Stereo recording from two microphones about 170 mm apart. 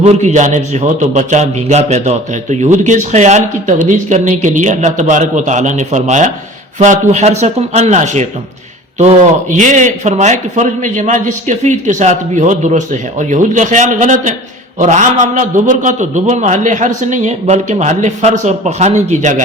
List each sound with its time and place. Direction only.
0.0 s a man's voice: 40° right (ahead or behind)